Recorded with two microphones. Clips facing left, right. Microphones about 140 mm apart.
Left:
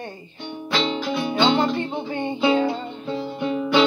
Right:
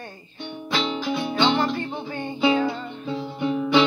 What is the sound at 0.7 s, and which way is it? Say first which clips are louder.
Music: left 2 dB; 5° right (ahead or behind).